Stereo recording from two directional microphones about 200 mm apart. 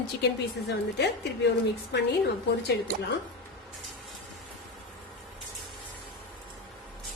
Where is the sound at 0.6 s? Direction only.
55° left (ahead or behind).